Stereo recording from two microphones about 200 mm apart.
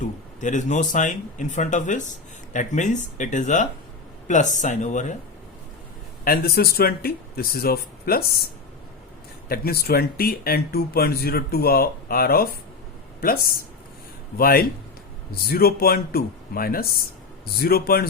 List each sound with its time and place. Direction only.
0.0 s speech: 40° left (ahead or behind)
6.2 s speech: 45° left (ahead or behind)
9.5 s speech: 50° left (ahead or behind)
14.3 s speech: 45° left (ahead or behind)